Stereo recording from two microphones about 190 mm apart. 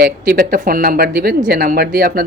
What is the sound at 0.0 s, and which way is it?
Speech, 50° right (ahead or behind).